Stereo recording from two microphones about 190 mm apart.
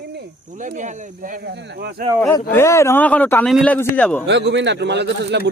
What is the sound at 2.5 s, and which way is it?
Speech, 15° left (ahead or behind).